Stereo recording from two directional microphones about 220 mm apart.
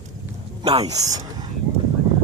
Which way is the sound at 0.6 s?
25° right (ahead or behind).